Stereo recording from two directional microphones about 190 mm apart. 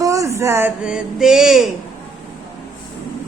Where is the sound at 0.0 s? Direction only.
15° right (ahead or behind).